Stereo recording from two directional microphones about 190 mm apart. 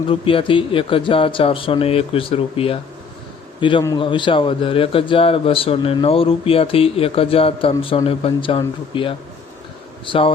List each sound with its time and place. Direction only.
0.1 s a man's voice: 30° left (ahead or behind)